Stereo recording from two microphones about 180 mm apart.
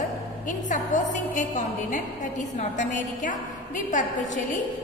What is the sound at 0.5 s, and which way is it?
A woman's voice, 45° left (ahead or behind).